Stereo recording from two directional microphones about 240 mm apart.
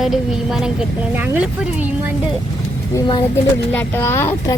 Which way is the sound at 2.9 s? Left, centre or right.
Centre.